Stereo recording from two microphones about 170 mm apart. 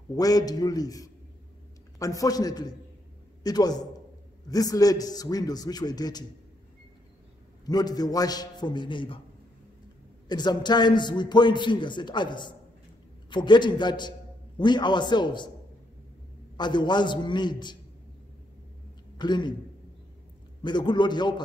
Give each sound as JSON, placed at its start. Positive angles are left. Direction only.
{"t": 0.1, "sound": "a man's voice", "side_deg": 20}
{"t": 7.6, "sound": "a man's voice", "side_deg": 25}
{"t": 10.2, "sound": "a man's voice", "side_deg": 25}
{"t": 16.5, "sound": "a man's voice", "side_deg": 25}
{"t": 19.1, "sound": "a man's voice", "side_deg": 25}
{"t": 20.6, "sound": "a man's voice", "side_deg": 25}